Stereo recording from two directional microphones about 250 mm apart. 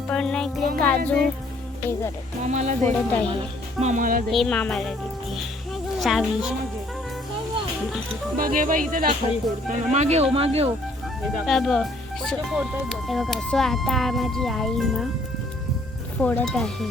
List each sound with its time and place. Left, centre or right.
0.1 s music: centre
0.8 s speech: centre
2.4 s speech: right
2.8 s speech: centre
3.8 s speech: right
4.3 s speech: centre
6.0 s speech: centre
8.4 s speech: right
11.2 s speech: centre
16.2 s speech: centre